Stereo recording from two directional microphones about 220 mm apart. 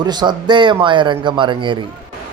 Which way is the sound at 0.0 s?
20° right (ahead or behind).